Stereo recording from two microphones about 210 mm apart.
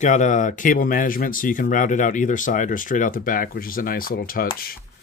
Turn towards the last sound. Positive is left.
turn(degrees=45)  # may be behind; listen again after turning